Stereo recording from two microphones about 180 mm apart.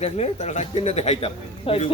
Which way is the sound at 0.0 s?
35° left (ahead or behind).